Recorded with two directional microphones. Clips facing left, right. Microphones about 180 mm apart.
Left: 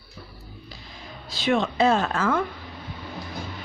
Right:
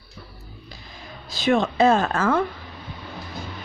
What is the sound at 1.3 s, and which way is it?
Speech, 45° right (ahead or behind).